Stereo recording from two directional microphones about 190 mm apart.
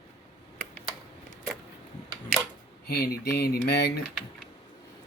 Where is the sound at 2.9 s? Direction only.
55° left (ahead or behind).